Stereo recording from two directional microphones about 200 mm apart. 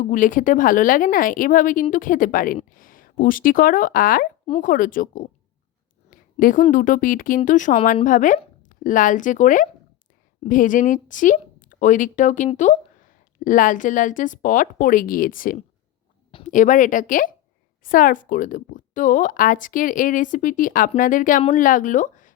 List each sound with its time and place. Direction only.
0.0 s speech: 40° left (ahead or behind)